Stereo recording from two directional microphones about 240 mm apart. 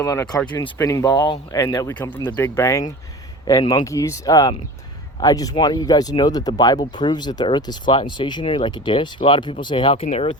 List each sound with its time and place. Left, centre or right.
0.0 s speech: centre